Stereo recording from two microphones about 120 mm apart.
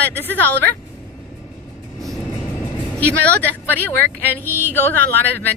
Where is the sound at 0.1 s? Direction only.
15° left (ahead or behind).